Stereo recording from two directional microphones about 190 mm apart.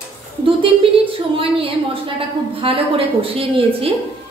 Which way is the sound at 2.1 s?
30° right (ahead or behind).